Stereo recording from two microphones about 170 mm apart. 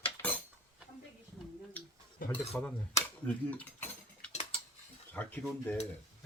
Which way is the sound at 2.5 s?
10° left (ahead or behind).